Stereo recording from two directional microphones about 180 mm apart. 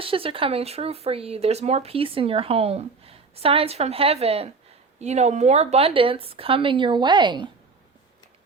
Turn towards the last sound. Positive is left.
turn(degrees=-25)  # may be behind; listen again after turning